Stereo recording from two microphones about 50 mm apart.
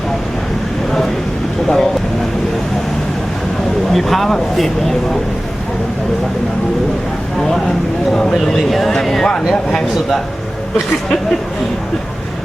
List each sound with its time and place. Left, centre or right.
1.6 s vehicle: centre
3.9 s speech: centre
8.1 s speech: centre